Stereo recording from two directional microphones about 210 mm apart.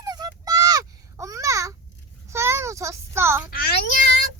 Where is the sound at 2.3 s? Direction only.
15° right (ahead or behind).